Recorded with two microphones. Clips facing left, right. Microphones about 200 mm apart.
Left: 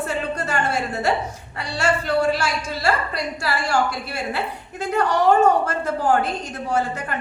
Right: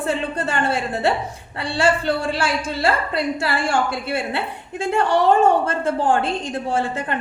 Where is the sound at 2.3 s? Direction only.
30° right (ahead or behind).